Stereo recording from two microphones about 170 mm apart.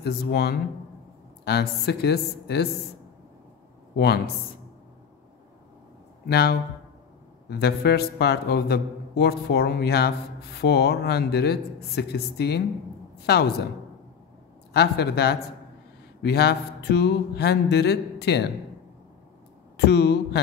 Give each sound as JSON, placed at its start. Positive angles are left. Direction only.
{"t": 0.0, "sound": "a man's voice", "side_deg": 70}
{"t": 3.9, "sound": "speech", "side_deg": 70}
{"t": 6.2, "sound": "a man's voice", "side_deg": 70}
{"t": 14.7, "sound": "a man's voice", "side_deg": 75}
{"t": 19.8, "sound": "a man's voice", "side_deg": 75}